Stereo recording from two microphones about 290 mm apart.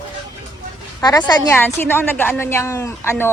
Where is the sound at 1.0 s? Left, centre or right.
Centre.